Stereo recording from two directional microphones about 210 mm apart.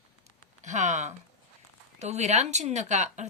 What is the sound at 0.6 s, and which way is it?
Speech, 35° right (ahead or behind).